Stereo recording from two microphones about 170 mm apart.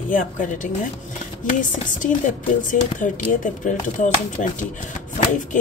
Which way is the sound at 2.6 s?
50° left (ahead or behind).